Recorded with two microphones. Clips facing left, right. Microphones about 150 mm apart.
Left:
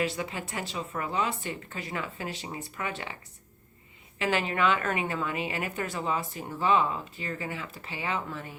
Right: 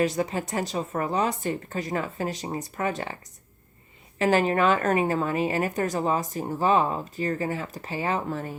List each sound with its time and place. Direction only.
0.0 s a woman's voice: 40° right (ahead or behind)
4.2 s a woman's voice: 40° right (ahead or behind)